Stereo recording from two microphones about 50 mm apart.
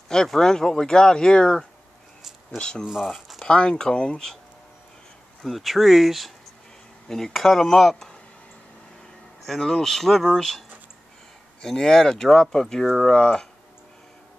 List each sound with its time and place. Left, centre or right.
0.1 s speech: centre
2.8 s speech: centre
3.1 s a sound: centre
3.4 s speech: centre
5.4 s speech: centre
7.1 s speech: centre
9.5 s speech: centre
11.6 s speech: centre